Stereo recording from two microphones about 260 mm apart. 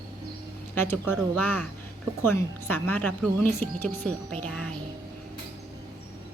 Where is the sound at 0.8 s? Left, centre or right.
Centre.